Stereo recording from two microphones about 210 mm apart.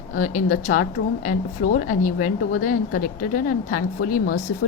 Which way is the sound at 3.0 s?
40° left (ahead or behind).